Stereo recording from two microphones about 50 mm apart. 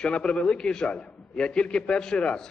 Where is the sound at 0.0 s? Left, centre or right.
Centre.